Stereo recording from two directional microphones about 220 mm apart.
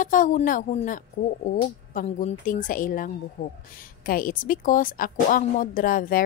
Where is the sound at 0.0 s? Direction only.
35° left (ahead or behind).